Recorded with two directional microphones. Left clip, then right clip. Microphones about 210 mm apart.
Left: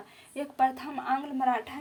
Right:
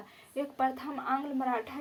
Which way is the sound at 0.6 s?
40° left (ahead or behind).